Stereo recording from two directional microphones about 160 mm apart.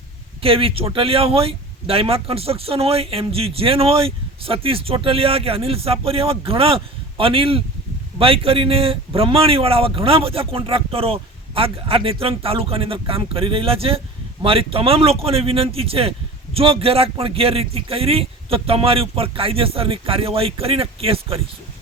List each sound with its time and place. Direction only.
0.4 s speech: 35° right (ahead or behind)